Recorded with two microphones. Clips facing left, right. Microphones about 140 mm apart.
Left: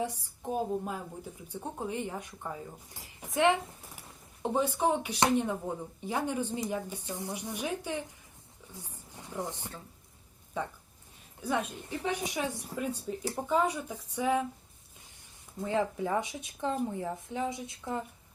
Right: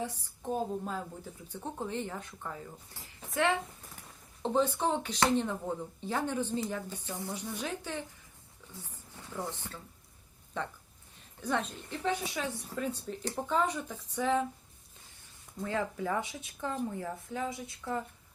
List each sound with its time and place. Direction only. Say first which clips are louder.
0.0 s a woman's voice: left 3 dB; 15° left (ahead or behind)
15.6 s speech: left 3 dB; 20° left (ahead or behind)